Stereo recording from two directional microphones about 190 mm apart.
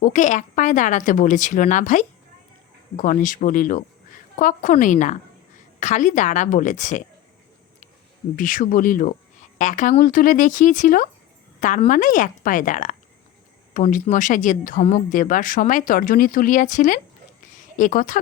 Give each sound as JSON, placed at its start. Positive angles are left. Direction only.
{"t": 0.0, "sound": "a woman's voice", "side_deg": 40}
{"t": 8.4, "sound": "speech", "side_deg": 45}